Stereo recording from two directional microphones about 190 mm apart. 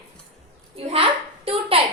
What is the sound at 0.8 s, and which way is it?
A child's voice, 30° right (ahead or behind).